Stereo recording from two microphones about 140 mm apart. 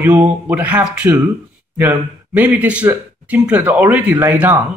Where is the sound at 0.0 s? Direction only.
10° right (ahead or behind).